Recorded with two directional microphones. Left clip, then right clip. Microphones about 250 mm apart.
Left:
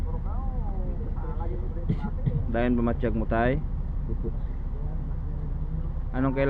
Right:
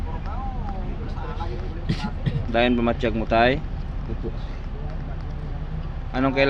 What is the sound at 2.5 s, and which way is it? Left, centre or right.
Speech, centre.